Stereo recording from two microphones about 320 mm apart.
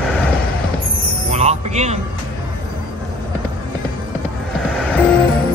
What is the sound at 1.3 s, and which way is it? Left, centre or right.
Music, centre.